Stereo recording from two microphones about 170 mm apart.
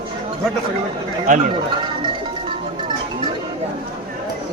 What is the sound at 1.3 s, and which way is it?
Speech, 45° right (ahead or behind).